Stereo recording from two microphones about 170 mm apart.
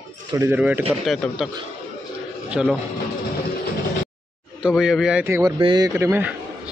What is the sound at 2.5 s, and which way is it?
Speech, 5° right (ahead or behind).